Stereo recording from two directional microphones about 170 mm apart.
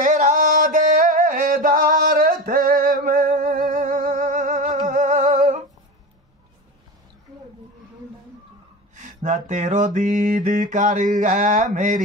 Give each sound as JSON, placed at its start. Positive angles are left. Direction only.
{"t": 0.0, "sound": "music", "side_deg": -50}
{"t": 8.9, "sound": "mantra", "side_deg": -45}